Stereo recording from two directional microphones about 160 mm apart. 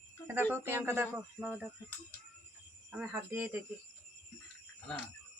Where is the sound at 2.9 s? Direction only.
10° right (ahead or behind).